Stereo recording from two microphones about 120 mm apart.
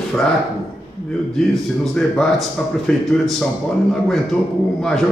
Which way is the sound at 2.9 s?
10° left (ahead or behind).